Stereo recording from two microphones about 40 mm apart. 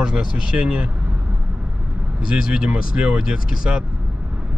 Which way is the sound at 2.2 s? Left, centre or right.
Centre.